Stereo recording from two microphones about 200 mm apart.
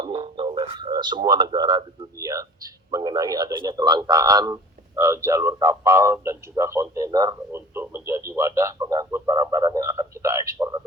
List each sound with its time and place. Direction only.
0.0 s radio: 25° right (ahead or behind)
2.9 s a man's voice: 20° right (ahead or behind)
8.3 s a sound: 15° right (ahead or behind)